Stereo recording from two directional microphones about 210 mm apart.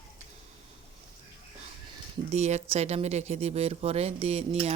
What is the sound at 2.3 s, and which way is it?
Speech, 30° right (ahead or behind).